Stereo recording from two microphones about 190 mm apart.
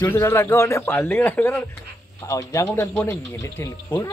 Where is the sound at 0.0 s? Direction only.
10° left (ahead or behind).